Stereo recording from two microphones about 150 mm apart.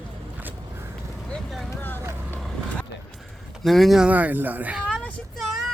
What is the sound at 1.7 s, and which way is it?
Vehicle, 15° left (ahead or behind).